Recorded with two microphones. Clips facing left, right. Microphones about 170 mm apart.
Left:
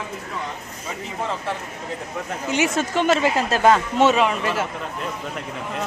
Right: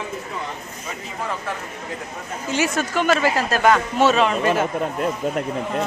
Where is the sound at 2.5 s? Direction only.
20° left (ahead or behind).